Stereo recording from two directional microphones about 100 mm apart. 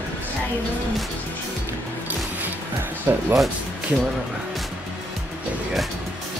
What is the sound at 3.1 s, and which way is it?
Speech, 30° right (ahead or behind).